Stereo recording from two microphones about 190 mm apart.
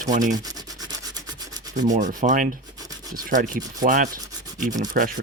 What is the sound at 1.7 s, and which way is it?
Rub, 40° right (ahead or behind).